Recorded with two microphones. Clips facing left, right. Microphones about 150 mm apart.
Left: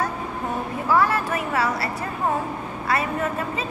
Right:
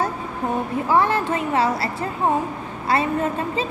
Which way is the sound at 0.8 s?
25° right (ahead or behind).